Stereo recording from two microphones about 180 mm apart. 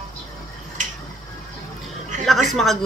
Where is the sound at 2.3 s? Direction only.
Centre (ahead or behind).